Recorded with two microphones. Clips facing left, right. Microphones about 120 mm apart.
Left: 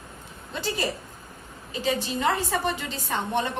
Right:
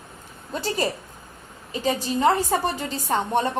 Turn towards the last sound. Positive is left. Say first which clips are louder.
# right 4 dB
turn(degrees=-40)  # may be behind; listen again after turning